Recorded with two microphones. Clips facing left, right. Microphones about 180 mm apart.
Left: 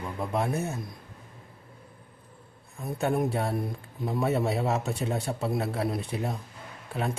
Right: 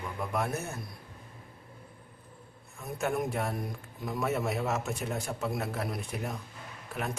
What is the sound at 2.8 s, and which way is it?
A man's voice, 35° left (ahead or behind).